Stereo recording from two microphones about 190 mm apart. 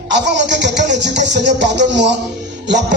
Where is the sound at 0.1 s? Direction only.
65° right (ahead or behind).